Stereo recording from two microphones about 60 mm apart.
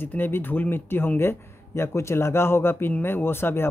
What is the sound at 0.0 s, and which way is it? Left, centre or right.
Speech, left.